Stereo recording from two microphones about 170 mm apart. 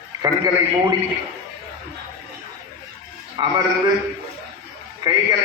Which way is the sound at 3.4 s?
20° right (ahead or behind).